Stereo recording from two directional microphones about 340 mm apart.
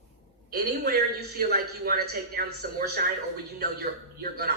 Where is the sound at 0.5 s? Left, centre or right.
Right.